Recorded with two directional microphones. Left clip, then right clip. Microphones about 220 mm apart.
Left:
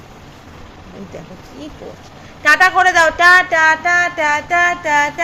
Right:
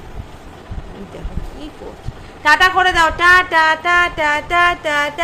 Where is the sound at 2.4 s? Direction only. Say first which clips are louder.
Left 1 dB; centre (ahead or behind).